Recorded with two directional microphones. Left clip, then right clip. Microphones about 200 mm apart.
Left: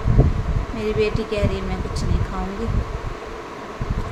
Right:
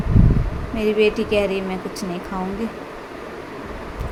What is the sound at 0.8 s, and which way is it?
Speech, 10° right (ahead or behind).